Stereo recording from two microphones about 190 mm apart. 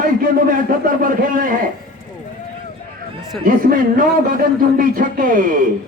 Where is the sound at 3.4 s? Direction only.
45° right (ahead or behind).